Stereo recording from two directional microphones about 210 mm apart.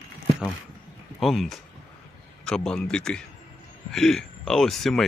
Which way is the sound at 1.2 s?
Centre (ahead or behind).